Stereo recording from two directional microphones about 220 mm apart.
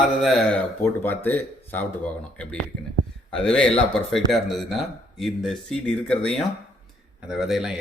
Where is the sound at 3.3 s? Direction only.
5° left (ahead or behind).